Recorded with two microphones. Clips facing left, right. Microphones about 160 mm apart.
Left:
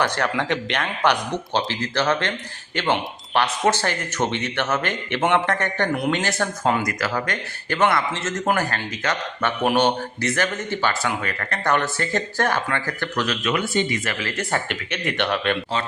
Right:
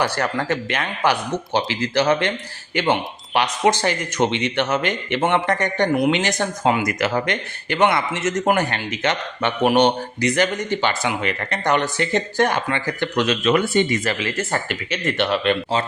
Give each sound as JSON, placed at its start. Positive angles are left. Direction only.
{"t": 0.0, "sound": "speech", "side_deg": -10}
{"t": 13.5, "sound": "speech", "side_deg": -45}
{"t": 14.1, "sound": "speech", "side_deg": -20}
{"t": 14.3, "sound": "speech", "side_deg": -5}